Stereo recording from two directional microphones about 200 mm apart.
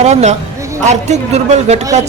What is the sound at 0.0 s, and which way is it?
A man's voice, 35° right (ahead or behind).